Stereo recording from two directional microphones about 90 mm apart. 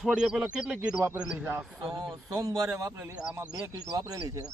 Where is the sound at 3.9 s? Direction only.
45° right (ahead or behind).